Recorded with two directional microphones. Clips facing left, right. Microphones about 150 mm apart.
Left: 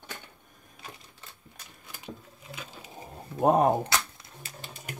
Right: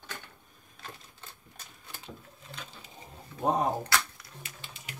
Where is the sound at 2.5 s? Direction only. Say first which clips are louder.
Left 3 dB; 5° left (ahead or behind).